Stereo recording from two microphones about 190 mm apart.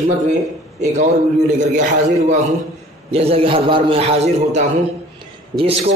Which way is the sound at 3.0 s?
30° right (ahead or behind).